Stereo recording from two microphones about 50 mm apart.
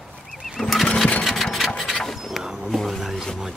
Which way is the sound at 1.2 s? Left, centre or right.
Centre.